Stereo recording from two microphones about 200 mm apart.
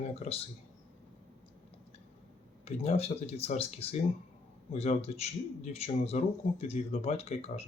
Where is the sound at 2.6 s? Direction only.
30° left (ahead or behind).